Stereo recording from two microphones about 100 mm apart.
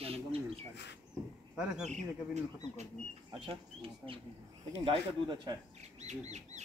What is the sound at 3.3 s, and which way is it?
Speech, 65° right (ahead or behind).